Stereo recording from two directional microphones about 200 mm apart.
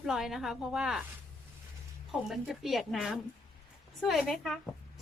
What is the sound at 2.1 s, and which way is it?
A woman's voice, centre (ahead or behind).